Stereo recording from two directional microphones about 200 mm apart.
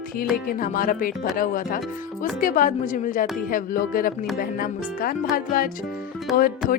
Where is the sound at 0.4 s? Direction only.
45° left (ahead or behind).